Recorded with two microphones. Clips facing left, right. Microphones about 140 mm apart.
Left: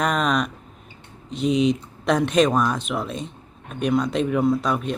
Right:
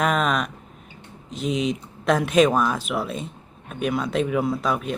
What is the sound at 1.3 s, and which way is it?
Speech, centre (ahead or behind).